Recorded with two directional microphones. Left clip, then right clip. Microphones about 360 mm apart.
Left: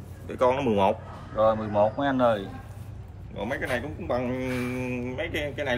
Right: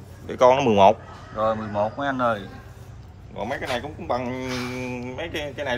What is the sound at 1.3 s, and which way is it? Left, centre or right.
A man's voice, centre.